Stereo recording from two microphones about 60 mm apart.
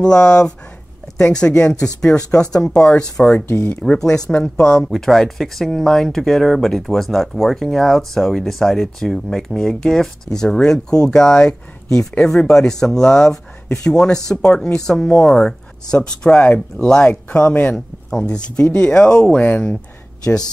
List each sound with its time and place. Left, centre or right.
0.0 s speech: centre
3.4 s speech: left
3.8 s speech: centre